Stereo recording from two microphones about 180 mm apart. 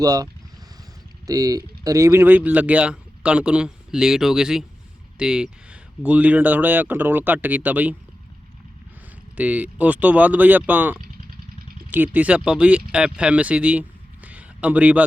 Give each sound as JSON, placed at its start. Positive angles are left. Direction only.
{"t": 0.0, "sound": "speech", "side_deg": -20}
{"t": 1.3, "sound": "speech", "side_deg": -20}
{"t": 9.4, "sound": "speech", "side_deg": -10}